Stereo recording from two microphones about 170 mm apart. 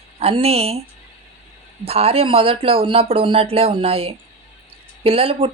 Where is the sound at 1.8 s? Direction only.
35° right (ahead or behind).